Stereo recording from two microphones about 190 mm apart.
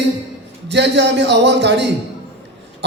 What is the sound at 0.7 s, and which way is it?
A man's voice, 65° right (ahead or behind).